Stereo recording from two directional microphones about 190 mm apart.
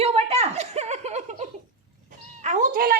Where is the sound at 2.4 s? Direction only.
40° right (ahead or behind).